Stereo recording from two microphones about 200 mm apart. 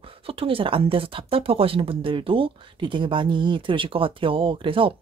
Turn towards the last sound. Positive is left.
turn(degrees=-25)  # may be behind; listen again after turning